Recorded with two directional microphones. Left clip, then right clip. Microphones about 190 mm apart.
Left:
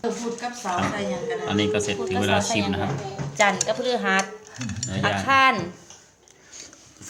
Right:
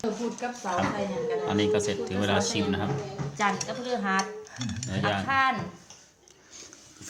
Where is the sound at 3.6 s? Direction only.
50° left (ahead or behind).